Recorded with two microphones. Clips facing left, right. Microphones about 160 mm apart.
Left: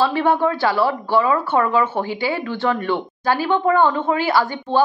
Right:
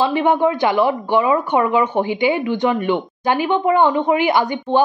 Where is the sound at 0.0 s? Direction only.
15° right (ahead or behind).